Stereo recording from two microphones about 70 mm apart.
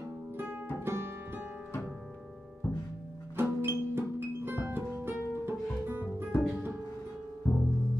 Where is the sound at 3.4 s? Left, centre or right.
Right.